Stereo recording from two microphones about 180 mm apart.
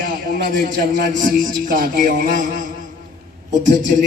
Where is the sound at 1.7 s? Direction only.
50° right (ahead or behind).